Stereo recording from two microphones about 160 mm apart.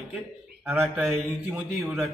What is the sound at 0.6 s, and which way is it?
A man's voice, 10° right (ahead or behind).